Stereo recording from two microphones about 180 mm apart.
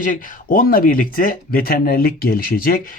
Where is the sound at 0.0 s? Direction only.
50° left (ahead or behind).